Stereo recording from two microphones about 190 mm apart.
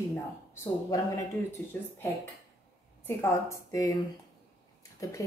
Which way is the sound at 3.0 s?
15° left (ahead or behind).